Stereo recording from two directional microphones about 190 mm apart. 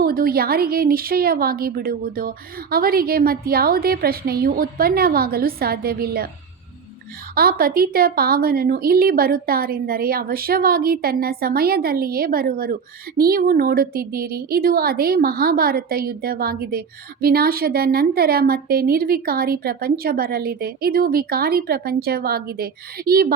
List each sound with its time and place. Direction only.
0.0 s a woman's voice: 50° right (ahead or behind)
7.3 s a woman's voice: 50° right (ahead or behind)